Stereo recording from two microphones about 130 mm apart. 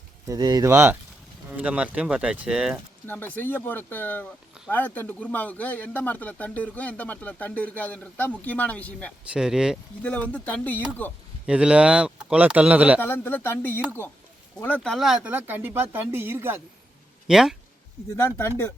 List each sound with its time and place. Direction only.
0.3 s speech: 30° right (ahead or behind)
1.5 s speech: 10° right (ahead or behind)
3.1 s speech: 15° left (ahead or behind)
9.2 s speech: 5° right (ahead or behind)
10.0 s speech: 10° left (ahead or behind)
11.4 s speech: 10° right (ahead or behind)
13.0 s speech: 15° left (ahead or behind)
14.9 s speech: 5° right (ahead or behind)
17.2 s speech: 5° right (ahead or behind)
18.2 s speech: 15° left (ahead or behind)